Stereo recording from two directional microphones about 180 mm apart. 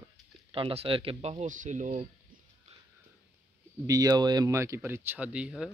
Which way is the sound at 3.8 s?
20° right (ahead or behind).